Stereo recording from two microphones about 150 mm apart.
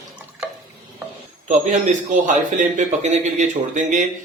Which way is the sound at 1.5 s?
55° right (ahead or behind).